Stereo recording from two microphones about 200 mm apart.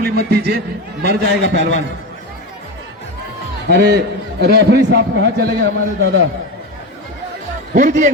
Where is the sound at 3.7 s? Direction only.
55° right (ahead or behind).